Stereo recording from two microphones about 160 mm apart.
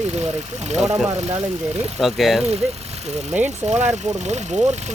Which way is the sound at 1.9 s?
Centre (ahead or behind).